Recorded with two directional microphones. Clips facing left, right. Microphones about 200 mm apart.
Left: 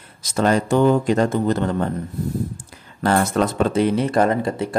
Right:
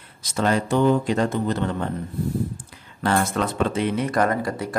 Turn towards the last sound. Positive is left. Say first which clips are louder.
# left 3 dB
turn(degrees=25)  # may be behind; listen again after turning